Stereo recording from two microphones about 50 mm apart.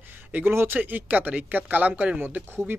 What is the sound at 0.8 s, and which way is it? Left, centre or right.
Speech, right.